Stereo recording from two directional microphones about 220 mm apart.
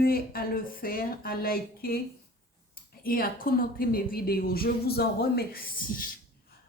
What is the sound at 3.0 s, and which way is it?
A woman's voice, 40° left (ahead or behind).